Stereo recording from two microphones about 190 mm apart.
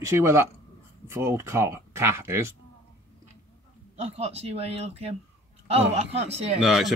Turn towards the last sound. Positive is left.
turn(degrees=0)  # may be behind; listen again after turning